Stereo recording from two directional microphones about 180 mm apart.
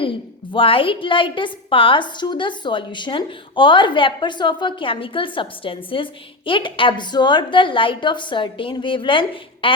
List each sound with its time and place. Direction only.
0.0 s a woman's voice: 30° left (ahead or behind)